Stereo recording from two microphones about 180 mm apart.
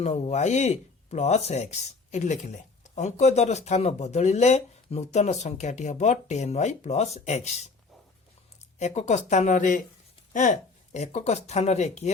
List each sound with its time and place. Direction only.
0.0 s speech: 40° left (ahead or behind)
8.8 s speech: 40° left (ahead or behind)